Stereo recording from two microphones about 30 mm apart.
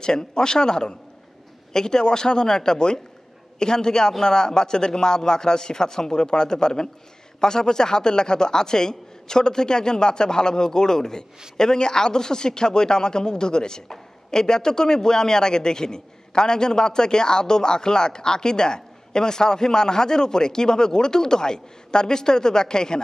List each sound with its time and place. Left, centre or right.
0.0 s a man's voice: left